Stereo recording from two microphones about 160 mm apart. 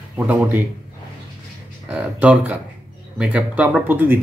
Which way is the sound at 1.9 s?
10° right (ahead or behind).